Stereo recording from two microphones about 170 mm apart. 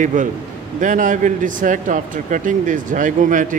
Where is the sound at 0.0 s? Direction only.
50° right (ahead or behind).